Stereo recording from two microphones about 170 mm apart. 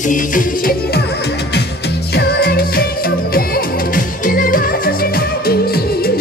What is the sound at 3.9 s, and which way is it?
Music, 55° left (ahead or behind).